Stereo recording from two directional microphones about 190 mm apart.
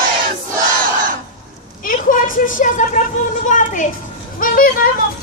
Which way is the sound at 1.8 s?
45° left (ahead or behind).